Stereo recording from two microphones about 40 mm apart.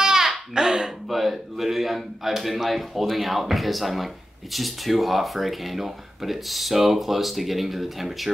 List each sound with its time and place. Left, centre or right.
0.0 s baby laughter: centre
0.6 s speech: centre